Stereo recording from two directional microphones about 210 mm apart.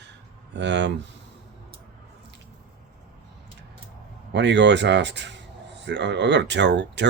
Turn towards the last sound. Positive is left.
turn(degrees=-55)  # may be behind; listen again after turning